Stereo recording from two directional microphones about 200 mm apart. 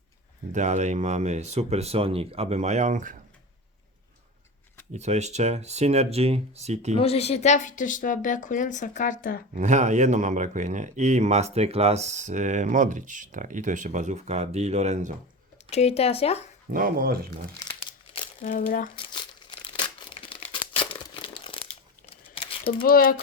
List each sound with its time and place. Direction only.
0.5 s speech: 35° right (ahead or behind)
4.9 s speech: 35° right (ahead or behind)
6.9 s a woman's voice: 30° left (ahead or behind)
9.6 s speech: 35° right (ahead or behind)
15.7 s a woman's voice: 30° left (ahead or behind)
16.7 s speech: 45° right (ahead or behind)
17.6 s crumpling: 20° left (ahead or behind)
18.4 s speech: 45° left (ahead or behind)
18.9 s crumpling: 25° left (ahead or behind)
22.6 s speech: 45° left (ahead or behind)